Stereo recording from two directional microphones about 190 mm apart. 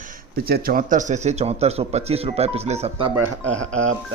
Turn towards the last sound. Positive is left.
turn(degrees=-90)